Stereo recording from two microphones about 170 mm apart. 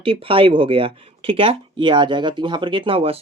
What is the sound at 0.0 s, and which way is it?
Speech, 35° right (ahead or behind).